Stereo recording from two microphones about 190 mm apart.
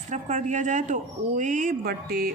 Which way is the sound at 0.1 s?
40° right (ahead or behind).